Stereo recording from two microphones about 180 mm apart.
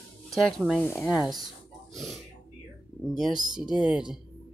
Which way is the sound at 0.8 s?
15° left (ahead or behind).